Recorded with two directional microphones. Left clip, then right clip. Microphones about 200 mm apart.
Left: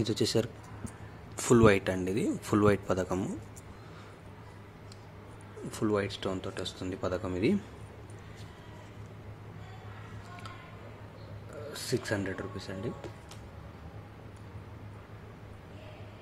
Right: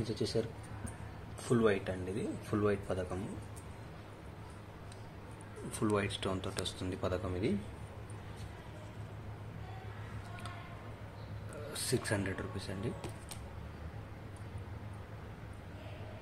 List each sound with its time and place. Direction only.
0.0 s speech: 40° left (ahead or behind)
5.7 s speech: 20° left (ahead or behind)
7.2 s a man's voice: 30° left (ahead or behind)
11.7 s speech: 10° left (ahead or behind)